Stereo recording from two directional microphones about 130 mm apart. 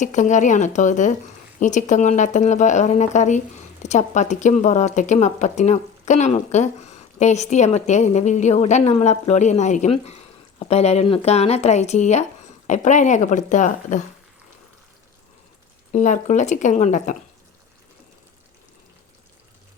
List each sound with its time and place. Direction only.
0.0 s a woman's voice: 70° left (ahead or behind)
15.9 s speech: 75° left (ahead or behind)